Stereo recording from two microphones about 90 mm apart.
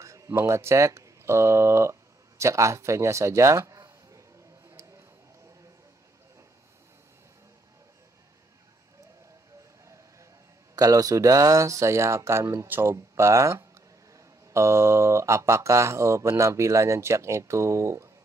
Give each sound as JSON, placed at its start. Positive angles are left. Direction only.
{"t": 0.0, "sound": "speech", "side_deg": -35}
{"t": 10.8, "sound": "speech", "side_deg": -40}
{"t": 12.6, "sound": "speech", "side_deg": -20}
{"t": 12.9, "sound": "speech", "side_deg": -35}